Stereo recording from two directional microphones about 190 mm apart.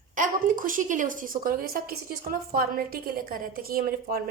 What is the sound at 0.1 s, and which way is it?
A woman's voice, 45° right (ahead or behind).